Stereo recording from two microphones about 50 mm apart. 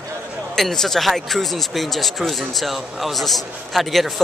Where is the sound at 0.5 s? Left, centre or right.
Centre.